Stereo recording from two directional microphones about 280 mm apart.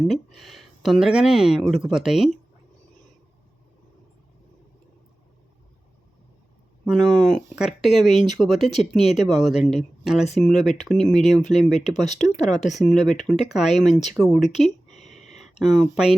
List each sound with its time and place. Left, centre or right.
0.3 s speech: centre
6.8 s speech: centre
12.0 s speech: left
13.1 s speech: centre
14.8 s a sound: left
15.3 s speech: centre